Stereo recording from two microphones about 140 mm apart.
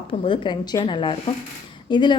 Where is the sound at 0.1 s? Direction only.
35° left (ahead or behind).